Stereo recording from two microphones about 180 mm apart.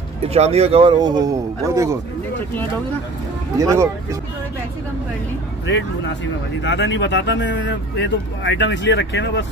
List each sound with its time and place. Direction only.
0.3 s speech: 35° right (ahead or behind); by 2.0 s 15° right (ahead or behind)
3.5 s speech: 15° right (ahead or behind)
5.7 s speech: 80° left